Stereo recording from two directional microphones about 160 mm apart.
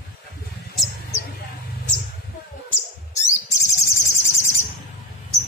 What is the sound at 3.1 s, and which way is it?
Bird, 20° left (ahead or behind).